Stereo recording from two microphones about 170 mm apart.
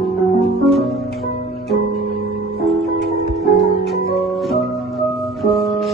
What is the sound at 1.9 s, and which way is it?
Music, 40° left (ahead or behind).